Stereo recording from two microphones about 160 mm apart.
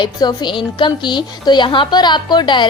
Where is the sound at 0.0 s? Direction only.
25° left (ahead or behind).